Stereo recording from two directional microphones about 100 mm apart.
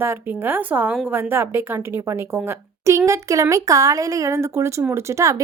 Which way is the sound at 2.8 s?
30° right (ahead or behind).